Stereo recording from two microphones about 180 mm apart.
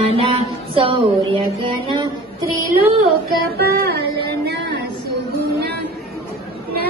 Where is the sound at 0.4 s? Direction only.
30° right (ahead or behind).